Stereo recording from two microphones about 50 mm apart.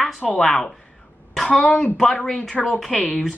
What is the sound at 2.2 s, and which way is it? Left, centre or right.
Speech, centre.